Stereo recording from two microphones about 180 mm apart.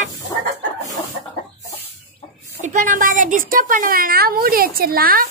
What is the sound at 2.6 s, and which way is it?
A woman's voice, 45° right (ahead or behind).